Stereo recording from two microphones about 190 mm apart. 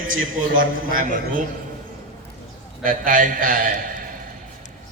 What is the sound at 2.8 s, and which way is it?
A man's voice, 45° right (ahead or behind).